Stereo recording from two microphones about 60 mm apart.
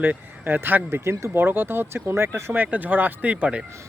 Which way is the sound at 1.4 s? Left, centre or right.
Right.